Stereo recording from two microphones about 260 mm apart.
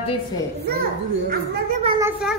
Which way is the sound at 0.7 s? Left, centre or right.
Right.